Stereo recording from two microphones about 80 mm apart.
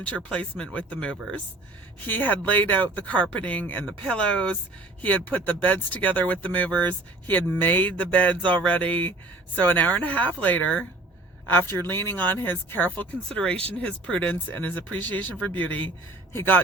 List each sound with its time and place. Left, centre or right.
0.0 s speech: centre
11.9 s speech: left
16.3 s speech: left